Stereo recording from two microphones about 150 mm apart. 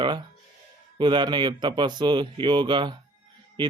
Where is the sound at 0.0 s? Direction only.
30° right (ahead or behind).